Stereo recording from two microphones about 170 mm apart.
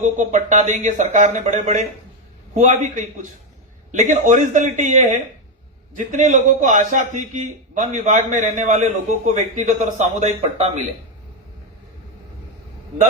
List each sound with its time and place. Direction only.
0.0 s a man's voice: 45° right (ahead or behind)